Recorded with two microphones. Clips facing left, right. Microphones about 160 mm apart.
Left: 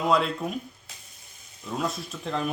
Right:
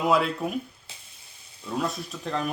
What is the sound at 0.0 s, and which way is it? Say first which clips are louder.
Speech: right 1 dB; 5° right (ahead or behind).